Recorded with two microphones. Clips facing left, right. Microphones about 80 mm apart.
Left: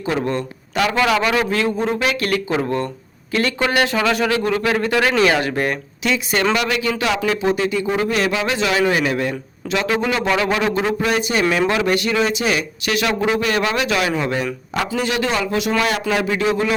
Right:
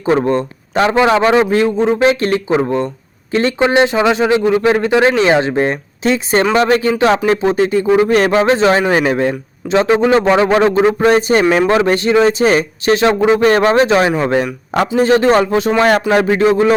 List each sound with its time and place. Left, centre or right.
0.0 s a man's voice: right